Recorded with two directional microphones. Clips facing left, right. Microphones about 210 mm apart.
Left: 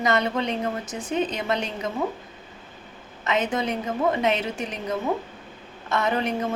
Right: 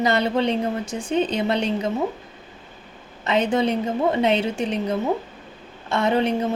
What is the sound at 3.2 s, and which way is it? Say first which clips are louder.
A woman's voice: right 5 dB; 30° right (ahead or behind).